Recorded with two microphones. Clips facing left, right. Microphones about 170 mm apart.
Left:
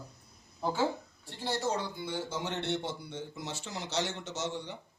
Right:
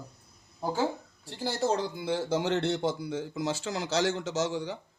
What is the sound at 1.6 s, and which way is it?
Speech, 90° right.